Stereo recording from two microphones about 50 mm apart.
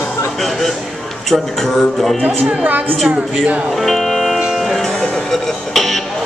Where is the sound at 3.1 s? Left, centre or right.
Right.